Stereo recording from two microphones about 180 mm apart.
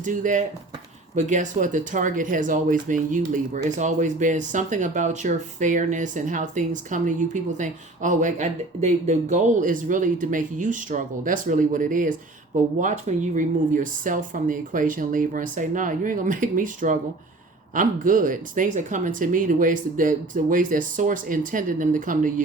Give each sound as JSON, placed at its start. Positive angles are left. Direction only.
{"t": 0.0, "sound": "speech", "side_deg": -45}